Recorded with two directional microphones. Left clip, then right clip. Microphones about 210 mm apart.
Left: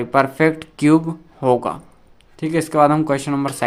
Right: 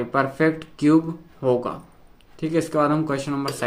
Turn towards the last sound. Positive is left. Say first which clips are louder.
# left 5 dB
turn(degrees=40)  # may be behind; listen again after turning